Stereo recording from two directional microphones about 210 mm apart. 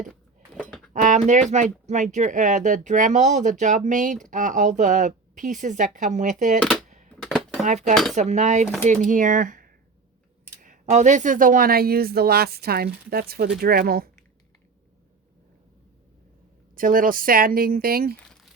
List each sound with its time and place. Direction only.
0.1 s a sound: 5° left (ahead or behind)
1.0 s speech: 35° right (ahead or behind)
6.6 s speech: centre (ahead or behind)
6.8 s a sound: 35° right (ahead or behind)
7.2 s a sound: centre (ahead or behind)
7.6 s speech: 35° right (ahead or behind)
8.6 s speech: centre (ahead or behind)
8.9 s speech: 40° right (ahead or behind)
16.7 s speech: 40° right (ahead or behind)